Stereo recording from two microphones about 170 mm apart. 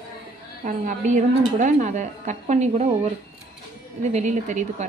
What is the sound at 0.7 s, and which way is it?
A woman's voice, 50° right (ahead or behind).